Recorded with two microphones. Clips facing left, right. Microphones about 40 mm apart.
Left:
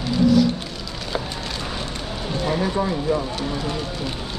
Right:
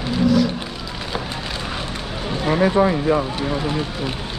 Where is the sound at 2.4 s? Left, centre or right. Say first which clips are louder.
Right 6 dB; right.